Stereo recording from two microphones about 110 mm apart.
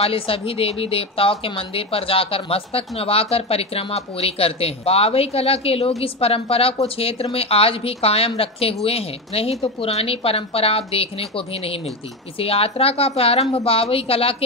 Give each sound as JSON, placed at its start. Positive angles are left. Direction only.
{"t": 0.0, "sound": "a woman's voice", "side_deg": 60}